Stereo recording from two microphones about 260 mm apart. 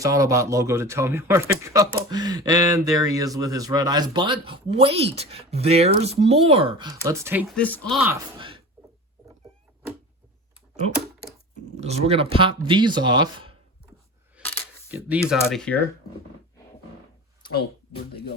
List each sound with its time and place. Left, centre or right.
0.0 s speech: centre
7.5 s speech: centre
8.4 s a sound: centre
11.8 s speech: right
14.4 s coin: centre
14.8 s speech: centre